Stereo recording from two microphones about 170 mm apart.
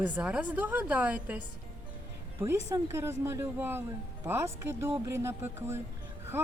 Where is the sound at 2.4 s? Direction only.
15° right (ahead or behind).